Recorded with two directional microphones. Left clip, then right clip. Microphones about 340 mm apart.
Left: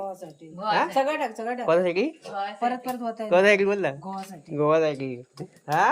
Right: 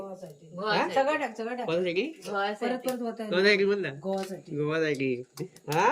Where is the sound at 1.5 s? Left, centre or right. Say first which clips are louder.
Left 8 dB; centre.